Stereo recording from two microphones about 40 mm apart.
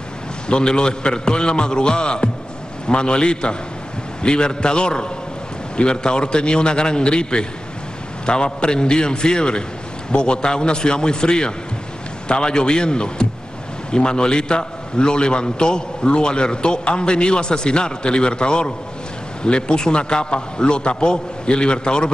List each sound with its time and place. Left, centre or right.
0.5 s a man's voice: left